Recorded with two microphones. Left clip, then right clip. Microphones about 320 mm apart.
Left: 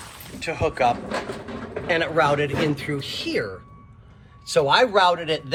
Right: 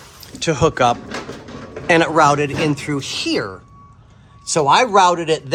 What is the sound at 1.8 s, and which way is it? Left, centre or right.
Speech, right.